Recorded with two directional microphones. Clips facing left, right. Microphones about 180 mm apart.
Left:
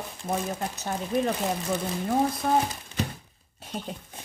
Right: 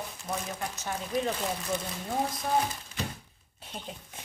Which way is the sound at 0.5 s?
35° left (ahead or behind).